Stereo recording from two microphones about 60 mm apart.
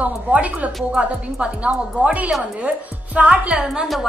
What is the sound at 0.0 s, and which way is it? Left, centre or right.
A woman's voice, right.